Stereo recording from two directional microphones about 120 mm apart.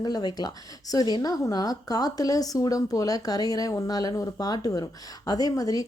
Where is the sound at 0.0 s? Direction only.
35° left (ahead or behind).